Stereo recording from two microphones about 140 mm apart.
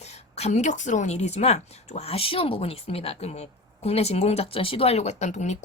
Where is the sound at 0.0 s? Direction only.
50° left (ahead or behind).